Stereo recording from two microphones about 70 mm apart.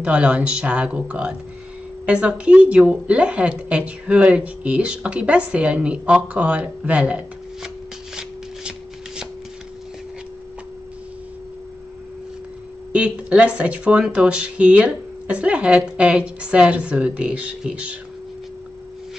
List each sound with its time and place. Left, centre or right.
0.0 s speech: centre
8.2 s shuffling cards: centre
12.9 s speech: centre